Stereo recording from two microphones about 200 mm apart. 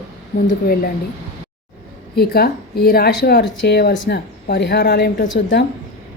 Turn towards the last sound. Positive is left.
turn(degrees=60)  # may be behind; listen again after turning